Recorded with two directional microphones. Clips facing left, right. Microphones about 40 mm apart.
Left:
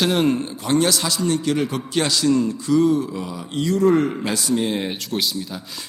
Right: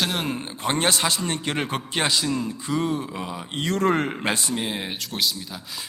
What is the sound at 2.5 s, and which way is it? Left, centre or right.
A man's voice, right.